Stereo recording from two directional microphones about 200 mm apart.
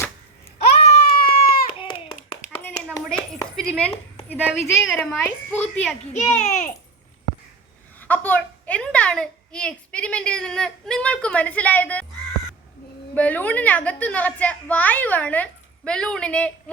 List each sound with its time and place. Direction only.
1.2 s a sound: 45° left (ahead or behind)
1.6 s hands: 25° left (ahead or behind)
2.6 s a sound: 5° left (ahead or behind)
4.3 s a child's voice: 5° left (ahead or behind)
6.1 s a child's voice: 35° left (ahead or behind)
7.9 s a child's voice: 10° left (ahead or behind)
13.1 s a woman's voice: 5° left (ahead or behind)